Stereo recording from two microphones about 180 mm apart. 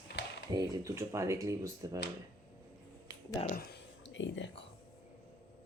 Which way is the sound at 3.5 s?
60° left (ahead or behind).